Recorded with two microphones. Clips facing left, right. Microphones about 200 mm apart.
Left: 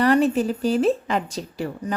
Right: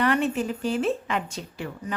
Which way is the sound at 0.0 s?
35° left (ahead or behind).